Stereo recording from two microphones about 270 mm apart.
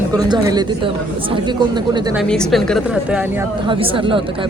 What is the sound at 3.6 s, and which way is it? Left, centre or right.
Speech, centre.